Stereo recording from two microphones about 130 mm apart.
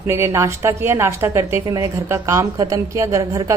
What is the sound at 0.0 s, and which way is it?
A woman's voice, 20° right (ahead or behind).